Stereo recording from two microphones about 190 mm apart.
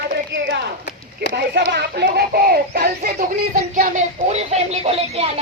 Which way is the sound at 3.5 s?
45° right (ahead or behind).